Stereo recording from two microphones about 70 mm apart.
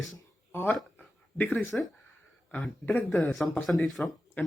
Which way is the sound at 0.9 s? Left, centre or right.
Left.